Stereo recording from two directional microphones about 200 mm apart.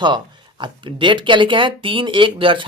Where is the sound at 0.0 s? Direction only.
25° right (ahead or behind).